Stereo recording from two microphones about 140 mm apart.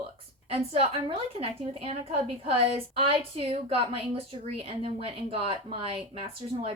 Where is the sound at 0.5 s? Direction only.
45° right (ahead or behind).